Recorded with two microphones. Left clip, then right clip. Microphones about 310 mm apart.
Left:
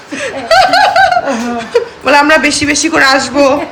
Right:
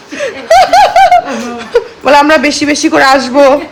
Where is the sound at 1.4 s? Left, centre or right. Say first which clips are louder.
Right 1 dB; centre.